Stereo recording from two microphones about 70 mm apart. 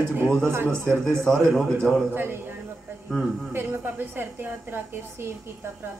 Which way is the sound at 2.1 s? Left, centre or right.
Right.